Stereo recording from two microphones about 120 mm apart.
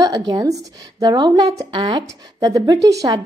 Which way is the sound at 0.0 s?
30° right (ahead or behind).